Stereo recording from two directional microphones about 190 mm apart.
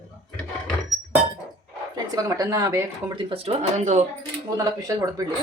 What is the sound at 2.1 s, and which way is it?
Speech, 15° right (ahead or behind).